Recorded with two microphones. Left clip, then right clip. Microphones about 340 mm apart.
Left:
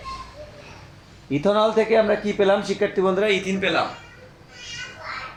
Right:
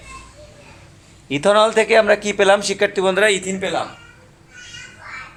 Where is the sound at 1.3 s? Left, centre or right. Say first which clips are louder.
Right 5 dB; right.